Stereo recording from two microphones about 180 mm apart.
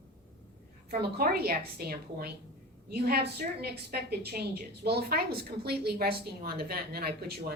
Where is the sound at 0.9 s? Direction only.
60° right (ahead or behind).